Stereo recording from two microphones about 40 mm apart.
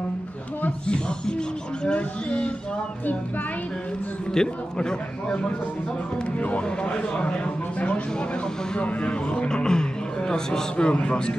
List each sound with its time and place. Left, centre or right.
0.8 s music: left
1.9 s speech: left
4.3 s speech: centre
6.4 s speech: left
8.7 s speech: left